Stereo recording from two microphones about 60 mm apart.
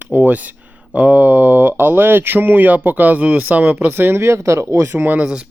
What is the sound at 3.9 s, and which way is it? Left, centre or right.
Speech, right.